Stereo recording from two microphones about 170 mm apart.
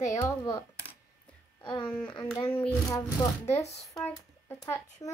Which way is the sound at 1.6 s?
30° left (ahead or behind).